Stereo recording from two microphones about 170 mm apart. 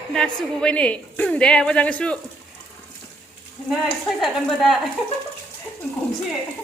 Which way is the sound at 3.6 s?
Centre (ahead or behind).